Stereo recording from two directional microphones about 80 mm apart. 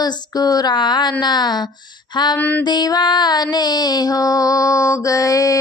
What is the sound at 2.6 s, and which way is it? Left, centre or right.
Music, left.